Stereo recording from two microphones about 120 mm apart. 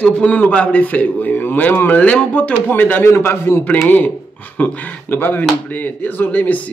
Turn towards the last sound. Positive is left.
turn(degrees=15)  # may be behind; listen again after turning